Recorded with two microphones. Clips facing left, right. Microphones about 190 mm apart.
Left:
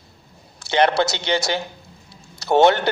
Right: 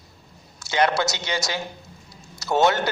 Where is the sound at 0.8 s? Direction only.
60° left (ahead or behind).